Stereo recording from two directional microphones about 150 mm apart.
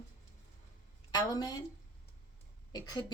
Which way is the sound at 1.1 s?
25° left (ahead or behind).